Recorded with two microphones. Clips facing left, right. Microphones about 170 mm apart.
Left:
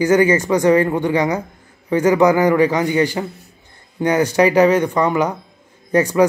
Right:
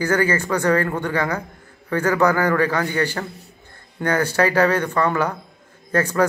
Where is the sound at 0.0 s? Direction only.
15° left (ahead or behind).